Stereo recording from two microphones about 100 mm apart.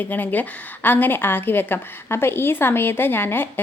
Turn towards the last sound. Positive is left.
turn(degrees=20)  # may be behind; listen again after turning